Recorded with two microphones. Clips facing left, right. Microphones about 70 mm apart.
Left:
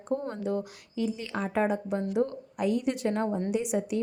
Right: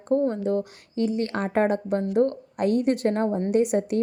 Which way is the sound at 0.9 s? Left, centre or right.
Right.